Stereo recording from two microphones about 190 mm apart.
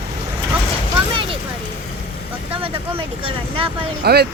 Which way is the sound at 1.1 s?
25° right (ahead or behind).